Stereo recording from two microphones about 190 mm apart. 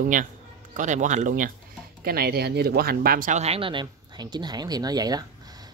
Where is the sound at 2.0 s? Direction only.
55° right (ahead or behind); by 5.2 s 20° right (ahead or behind).